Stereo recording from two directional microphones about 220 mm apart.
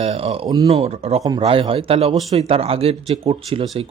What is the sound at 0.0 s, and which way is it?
Speech, 25° right (ahead or behind).